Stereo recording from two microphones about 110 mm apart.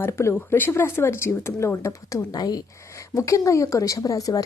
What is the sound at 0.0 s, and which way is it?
Speech, 25° left (ahead or behind).